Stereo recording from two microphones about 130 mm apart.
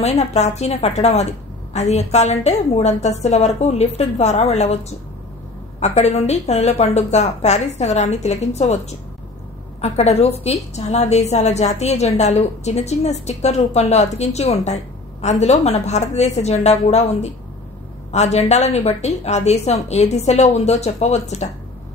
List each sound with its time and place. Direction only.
0.0 s a woman's voice: 55° left (ahead or behind)
9.8 s a woman's voice: 55° left (ahead or behind)